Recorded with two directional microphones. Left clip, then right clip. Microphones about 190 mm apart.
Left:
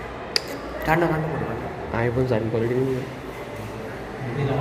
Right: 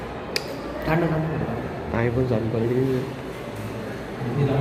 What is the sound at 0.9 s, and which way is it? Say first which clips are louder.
Speech: left 3 dB; 35° left (ahead or behind).